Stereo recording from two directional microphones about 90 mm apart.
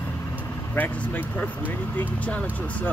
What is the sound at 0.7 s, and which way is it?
Speech, 15° left (ahead or behind).